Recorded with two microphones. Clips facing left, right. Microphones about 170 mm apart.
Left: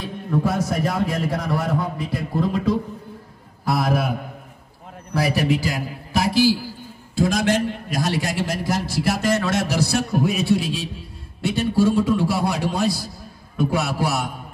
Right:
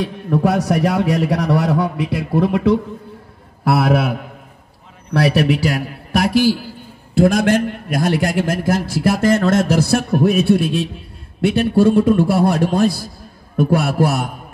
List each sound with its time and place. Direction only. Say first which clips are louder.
0.0 s a man's voice: right 5 dB; 70° right (ahead or behind); by 14.3 s 55° right (ahead or behind)